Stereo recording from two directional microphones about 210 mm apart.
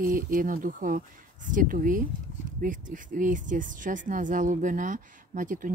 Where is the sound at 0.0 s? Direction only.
40° right (ahead or behind).